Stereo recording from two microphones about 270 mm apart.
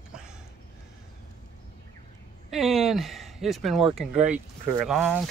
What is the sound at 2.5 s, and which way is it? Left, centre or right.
Speech, centre.